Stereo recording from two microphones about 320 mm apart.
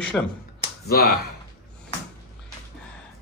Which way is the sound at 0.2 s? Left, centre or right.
Centre.